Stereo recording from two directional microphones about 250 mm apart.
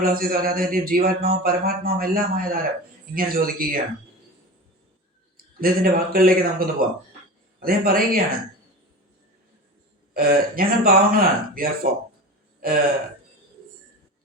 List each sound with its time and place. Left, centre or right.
0.0 s speech: right
5.4 s speech: right
10.2 s speech: right